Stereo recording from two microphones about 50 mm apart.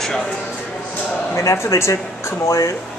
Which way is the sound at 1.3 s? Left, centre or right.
Left.